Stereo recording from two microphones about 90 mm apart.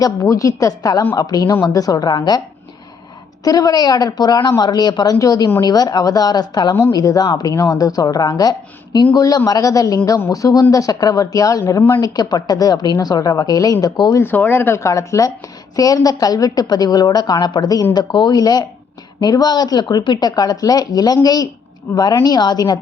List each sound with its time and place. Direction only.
0.0 s a woman's voice: 40° left (ahead or behind)
3.4 s a woman's voice: 45° left (ahead or behind)
14.2 s a woman's voice: 25° left (ahead or behind); by 21.5 s 50° left (ahead or behind)
21.9 s speech: 20° left (ahead or behind)
22.2 s a woman's voice: 50° left (ahead or behind)